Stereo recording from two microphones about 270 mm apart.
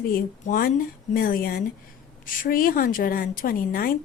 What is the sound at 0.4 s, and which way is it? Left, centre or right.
A woman's voice, left.